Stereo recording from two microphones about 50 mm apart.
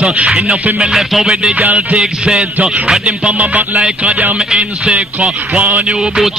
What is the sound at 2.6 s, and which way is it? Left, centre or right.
Speech, right.